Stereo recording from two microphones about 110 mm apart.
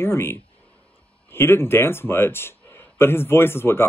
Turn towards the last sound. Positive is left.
turn(degrees=20)  # may be behind; listen again after turning